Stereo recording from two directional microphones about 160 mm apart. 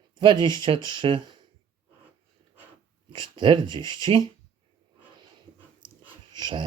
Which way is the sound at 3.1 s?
30° right (ahead or behind).